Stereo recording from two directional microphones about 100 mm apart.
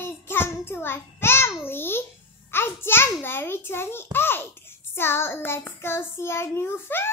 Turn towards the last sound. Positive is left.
turn(degrees=25)  # may be behind; listen again after turning